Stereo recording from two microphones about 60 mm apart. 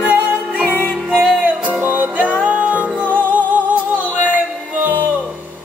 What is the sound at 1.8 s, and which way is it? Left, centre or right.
Music, right.